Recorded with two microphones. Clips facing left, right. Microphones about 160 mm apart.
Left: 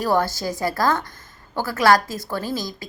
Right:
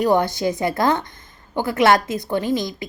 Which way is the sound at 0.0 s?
20° right (ahead or behind).